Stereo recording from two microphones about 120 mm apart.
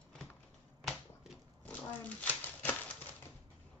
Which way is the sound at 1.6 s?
10° left (ahead or behind).